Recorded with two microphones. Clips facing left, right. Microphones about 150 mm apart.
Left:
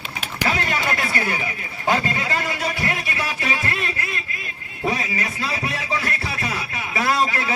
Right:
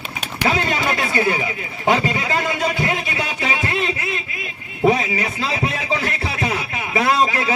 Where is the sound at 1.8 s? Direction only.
20° right (ahead or behind).